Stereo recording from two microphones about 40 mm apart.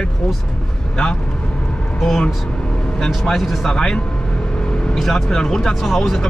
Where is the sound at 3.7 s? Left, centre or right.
Centre.